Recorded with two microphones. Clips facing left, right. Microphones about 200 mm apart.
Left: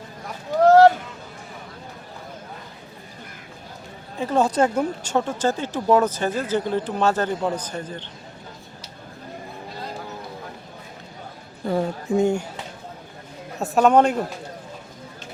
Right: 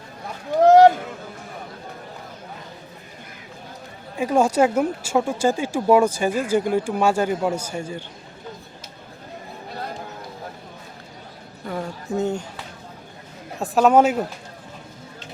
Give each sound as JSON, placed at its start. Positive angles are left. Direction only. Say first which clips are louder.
{"t": 0.6, "sound": "a sound", "louder": "right 1 dB", "side_deg": -20}
{"t": 4.2, "sound": "speech", "louder": "right 2 dB", "side_deg": -10}
{"t": 11.6, "sound": "speech", "louder": "left 6 dB", "side_deg": 30}
{"t": 12.1, "sound": "speech", "louder": "left 4 dB", "side_deg": 10}
{"t": 13.6, "sound": "a man's voice", "louder": "right 1 dB", "side_deg": 0}